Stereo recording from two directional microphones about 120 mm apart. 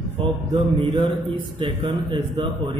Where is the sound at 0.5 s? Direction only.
40° right (ahead or behind).